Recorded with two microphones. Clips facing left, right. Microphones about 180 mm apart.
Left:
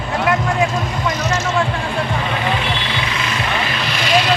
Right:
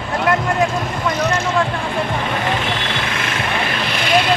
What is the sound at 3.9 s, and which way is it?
Vehicle, 55° right (ahead or behind).